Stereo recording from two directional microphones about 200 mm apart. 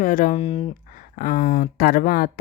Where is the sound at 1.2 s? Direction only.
45° left (ahead or behind).